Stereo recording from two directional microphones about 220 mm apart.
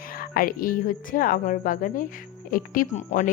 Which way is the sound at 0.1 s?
40° left (ahead or behind).